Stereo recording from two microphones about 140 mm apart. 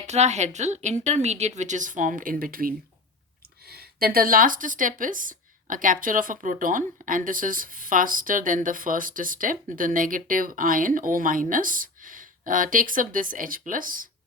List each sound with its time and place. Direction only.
0.1 s a woman's voice: 55° right (ahead or behind); by 14.1 s 80° right